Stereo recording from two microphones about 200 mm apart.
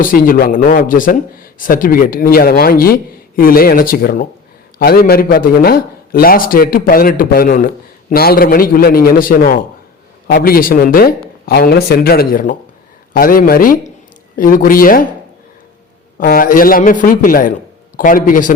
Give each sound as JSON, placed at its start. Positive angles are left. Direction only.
{"t": 0.0, "sound": "speech", "side_deg": 45}
{"t": 16.1, "sound": "speech", "side_deg": 40}